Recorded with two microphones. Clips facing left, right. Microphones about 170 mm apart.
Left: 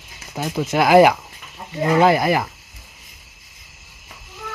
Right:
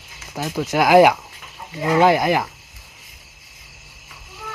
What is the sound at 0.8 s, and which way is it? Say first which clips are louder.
Speech: even; 10° right (ahead or behind).